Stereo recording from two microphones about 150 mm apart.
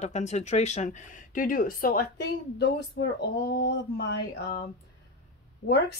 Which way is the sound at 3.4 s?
90° left.